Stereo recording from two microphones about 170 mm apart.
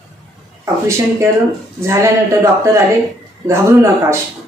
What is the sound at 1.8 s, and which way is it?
Speech, 15° right (ahead or behind).